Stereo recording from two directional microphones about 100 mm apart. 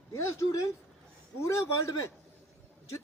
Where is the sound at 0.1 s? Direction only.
30° left (ahead or behind).